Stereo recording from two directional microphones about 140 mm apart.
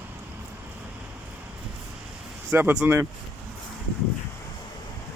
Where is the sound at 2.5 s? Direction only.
10° right (ahead or behind).